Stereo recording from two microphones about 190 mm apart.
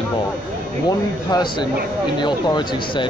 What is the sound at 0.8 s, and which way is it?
Speech, 20° left (ahead or behind).